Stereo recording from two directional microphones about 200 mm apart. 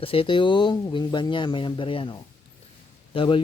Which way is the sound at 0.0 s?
25° left (ahead or behind).